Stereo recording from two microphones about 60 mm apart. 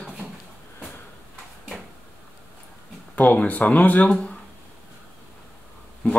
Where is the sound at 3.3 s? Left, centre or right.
Left.